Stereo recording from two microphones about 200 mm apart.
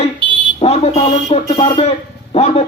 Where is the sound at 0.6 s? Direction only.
30° left (ahead or behind).